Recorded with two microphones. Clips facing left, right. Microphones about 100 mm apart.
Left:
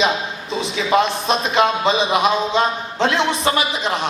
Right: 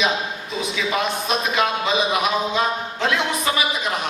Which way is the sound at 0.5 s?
30° left (ahead or behind).